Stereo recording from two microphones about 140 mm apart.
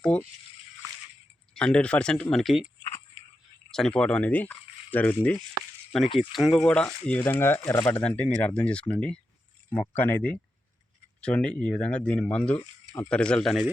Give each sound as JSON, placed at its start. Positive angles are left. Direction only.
{"t": 0.1, "sound": "speech", "side_deg": 10}
{"t": 1.5, "sound": "speech", "side_deg": 5}
{"t": 3.7, "sound": "speech", "side_deg": 5}
{"t": 6.1, "sound": "speech", "side_deg": 0}